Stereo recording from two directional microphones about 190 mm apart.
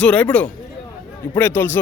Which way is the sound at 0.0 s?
5° left (ahead or behind).